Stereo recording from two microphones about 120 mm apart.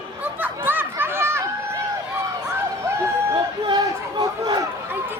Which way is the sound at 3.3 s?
40° right (ahead or behind).